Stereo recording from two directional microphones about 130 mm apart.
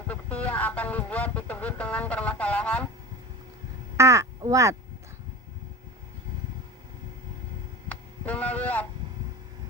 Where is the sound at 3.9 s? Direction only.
20° right (ahead or behind).